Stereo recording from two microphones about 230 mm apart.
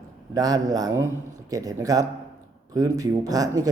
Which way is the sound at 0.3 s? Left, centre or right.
Centre.